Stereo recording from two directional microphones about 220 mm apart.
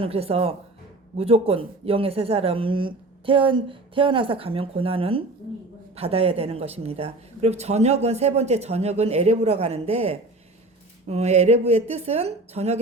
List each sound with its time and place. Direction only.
0.0 s speech: 25° right (ahead or behind)